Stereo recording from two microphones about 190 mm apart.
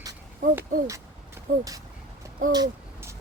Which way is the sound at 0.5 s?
15° right (ahead or behind).